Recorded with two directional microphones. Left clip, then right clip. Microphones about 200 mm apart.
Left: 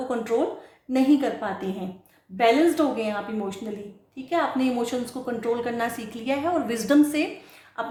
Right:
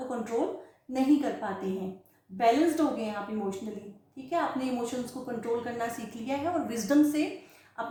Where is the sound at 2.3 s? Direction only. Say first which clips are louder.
Left 5 dB; 45° left (ahead or behind).